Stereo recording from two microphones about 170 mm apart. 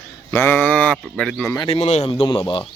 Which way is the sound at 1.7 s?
40° left (ahead or behind).